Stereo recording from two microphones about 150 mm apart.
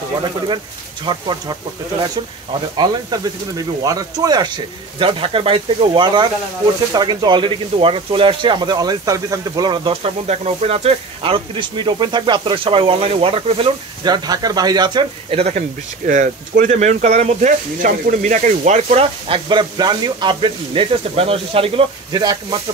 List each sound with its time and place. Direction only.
1.0 s speech: 30° right (ahead or behind)
15.3 s speech: 45° right (ahead or behind)
16.1 s speech: 60° right (ahead or behind); by 22.2 s 40° right (ahead or behind)
22.2 s speech: 25° right (ahead or behind)